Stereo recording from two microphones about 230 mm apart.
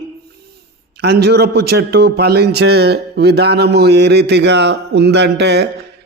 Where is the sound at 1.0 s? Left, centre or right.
Right.